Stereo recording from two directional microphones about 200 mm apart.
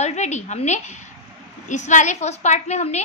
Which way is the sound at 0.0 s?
35° left (ahead or behind).